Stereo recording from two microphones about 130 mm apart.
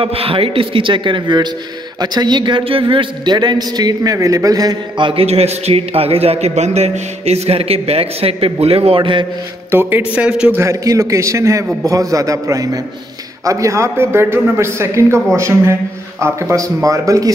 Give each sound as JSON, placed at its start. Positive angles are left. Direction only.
{"t": 0.0, "sound": "a man's voice", "side_deg": -45}
{"t": 9.7, "sound": "a man's voice", "side_deg": -15}
{"t": 10.6, "sound": "a man's voice", "side_deg": -25}